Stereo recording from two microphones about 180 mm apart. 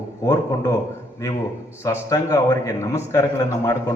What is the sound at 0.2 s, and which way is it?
Speech, 15° left (ahead or behind).